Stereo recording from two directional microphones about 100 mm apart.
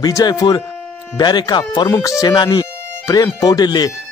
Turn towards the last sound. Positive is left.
turn(degrees=45)  # may be behind; listen again after turning